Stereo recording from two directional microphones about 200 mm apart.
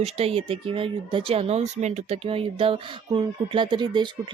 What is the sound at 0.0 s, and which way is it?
Speech, 30° right (ahead or behind).